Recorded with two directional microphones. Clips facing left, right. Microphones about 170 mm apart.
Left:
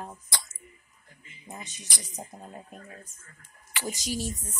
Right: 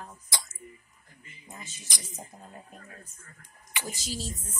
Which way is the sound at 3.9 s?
15° left (ahead or behind).